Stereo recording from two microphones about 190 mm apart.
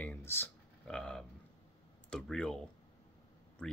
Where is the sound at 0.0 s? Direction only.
10° left (ahead or behind).